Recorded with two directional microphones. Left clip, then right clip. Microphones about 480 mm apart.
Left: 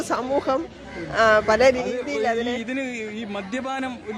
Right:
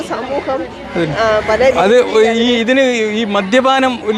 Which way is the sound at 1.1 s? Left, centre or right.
Left.